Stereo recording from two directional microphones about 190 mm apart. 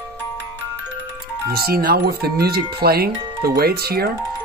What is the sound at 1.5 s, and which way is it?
Speech, 55° right (ahead or behind).